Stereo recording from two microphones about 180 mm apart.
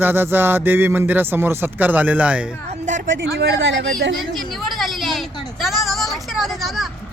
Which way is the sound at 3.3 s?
75° right (ahead or behind).